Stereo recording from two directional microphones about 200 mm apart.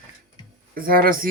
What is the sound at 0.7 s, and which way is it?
Speech, 45° right (ahead or behind).